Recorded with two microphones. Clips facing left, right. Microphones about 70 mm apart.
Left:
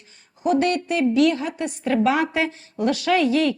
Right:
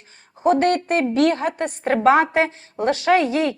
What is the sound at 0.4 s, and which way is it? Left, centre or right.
A woman's voice, right.